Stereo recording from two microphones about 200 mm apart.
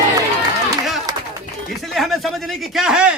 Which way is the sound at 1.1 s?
20° right (ahead or behind).